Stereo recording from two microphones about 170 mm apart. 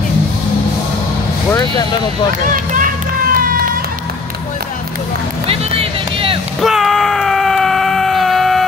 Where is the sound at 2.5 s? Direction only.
50° right (ahead or behind).